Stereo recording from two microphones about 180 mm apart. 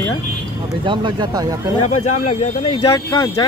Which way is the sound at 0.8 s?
25° right (ahead or behind).